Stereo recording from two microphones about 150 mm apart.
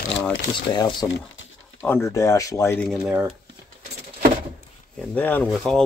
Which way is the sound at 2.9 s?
5° right (ahead or behind).